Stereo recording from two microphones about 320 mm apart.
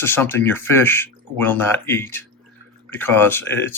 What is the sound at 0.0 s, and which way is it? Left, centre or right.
Speech, centre.